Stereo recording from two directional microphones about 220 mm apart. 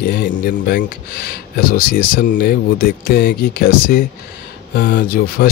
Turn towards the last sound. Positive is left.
turn(degrees=45)  # may be behind; listen again after turning